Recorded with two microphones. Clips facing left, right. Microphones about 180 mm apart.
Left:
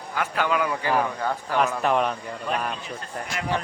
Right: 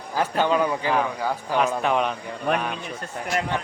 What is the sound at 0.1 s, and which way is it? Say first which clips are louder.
Speech: right 3 dB; 30° right (ahead or behind).